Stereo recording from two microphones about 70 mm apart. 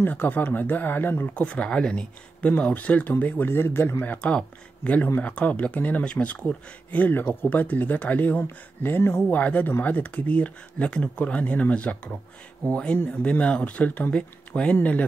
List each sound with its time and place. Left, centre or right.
0.0 s speech: left
1.3 s speech: centre; by 9.2 s left
9.3 s speech: left